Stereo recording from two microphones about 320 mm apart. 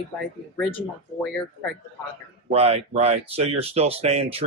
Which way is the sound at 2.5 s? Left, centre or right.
Centre.